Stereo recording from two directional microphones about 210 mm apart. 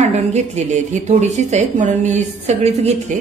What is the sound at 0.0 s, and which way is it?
A woman's voice, 30° right (ahead or behind).